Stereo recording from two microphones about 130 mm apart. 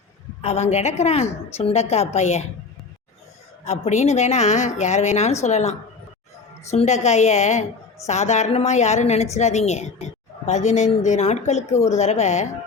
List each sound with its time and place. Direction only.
0.4 s a woman's voice: 55° left (ahead or behind)
3.6 s a woman's voice: 60° left (ahead or behind)